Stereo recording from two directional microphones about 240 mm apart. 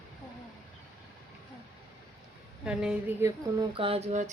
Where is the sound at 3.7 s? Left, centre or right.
Right.